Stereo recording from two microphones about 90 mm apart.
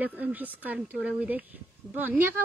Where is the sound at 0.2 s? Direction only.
20° right (ahead or behind).